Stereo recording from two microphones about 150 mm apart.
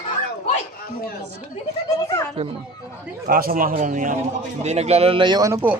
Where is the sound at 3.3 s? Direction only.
75° right (ahead or behind).